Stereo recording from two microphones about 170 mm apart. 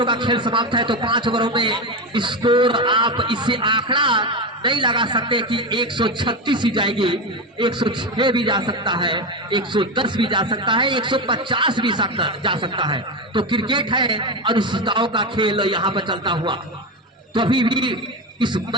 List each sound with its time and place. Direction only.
0.0 s a man's voice: 25° right (ahead or behind)